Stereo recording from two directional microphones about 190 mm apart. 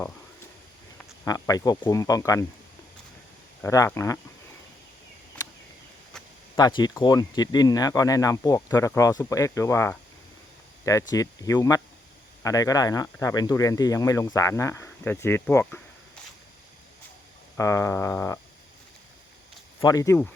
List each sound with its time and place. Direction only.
1.2 s speech: 20° left (ahead or behind)
3.6 s speech: 15° left (ahead or behind)
6.6 s speech: 20° left (ahead or behind)
17.6 s speech: 15° left (ahead or behind)
19.8 s speech: 20° left (ahead or behind)